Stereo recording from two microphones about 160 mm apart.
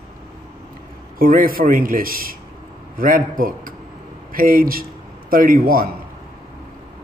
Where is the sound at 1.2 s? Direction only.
65° right (ahead or behind).